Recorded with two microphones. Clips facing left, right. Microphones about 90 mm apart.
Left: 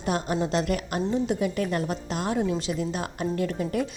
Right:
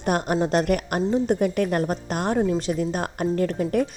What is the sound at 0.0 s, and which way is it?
A woman's voice, 55° right (ahead or behind).